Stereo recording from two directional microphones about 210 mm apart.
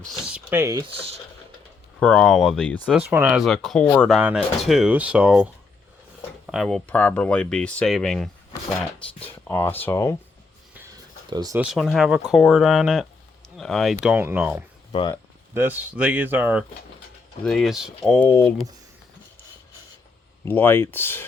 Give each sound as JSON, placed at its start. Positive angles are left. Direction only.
{"t": 0.0, "sound": "speech", "side_deg": -5}
{"t": 2.0, "sound": "speech", "side_deg": 5}
{"t": 2.9, "sound": "speech", "side_deg": -10}
{"t": 4.2, "sound": "speech", "side_deg": -5}
{"t": 6.5, "sound": "speech", "side_deg": 0}
{"t": 11.3, "sound": "speech", "side_deg": -20}
{"t": 11.6, "sound": "speech", "side_deg": 0}
{"t": 20.4, "sound": "speech", "side_deg": 10}